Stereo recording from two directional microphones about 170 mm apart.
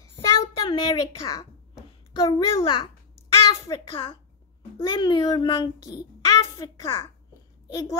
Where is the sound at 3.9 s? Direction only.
35° left (ahead or behind).